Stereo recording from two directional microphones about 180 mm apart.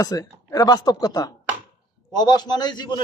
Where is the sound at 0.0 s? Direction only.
20° left (ahead or behind).